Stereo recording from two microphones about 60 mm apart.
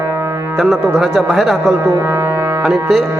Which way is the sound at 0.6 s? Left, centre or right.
Centre.